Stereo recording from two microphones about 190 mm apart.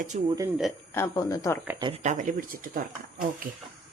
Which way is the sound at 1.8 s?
25° right (ahead or behind).